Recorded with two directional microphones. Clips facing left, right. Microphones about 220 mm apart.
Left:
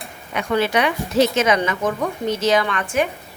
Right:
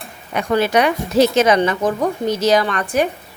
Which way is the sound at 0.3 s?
40° right (ahead or behind).